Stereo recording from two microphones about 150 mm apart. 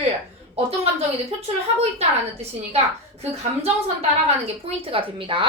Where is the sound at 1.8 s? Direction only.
45° right (ahead or behind).